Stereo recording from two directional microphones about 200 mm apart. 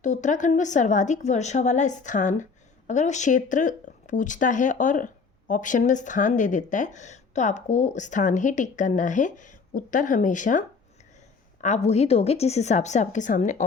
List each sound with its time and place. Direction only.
0.0 s a woman's voice: 40° left (ahead or behind)
11.6 s a woman's voice: 35° left (ahead or behind)